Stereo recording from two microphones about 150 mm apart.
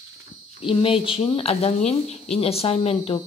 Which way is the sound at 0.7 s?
35° left (ahead or behind).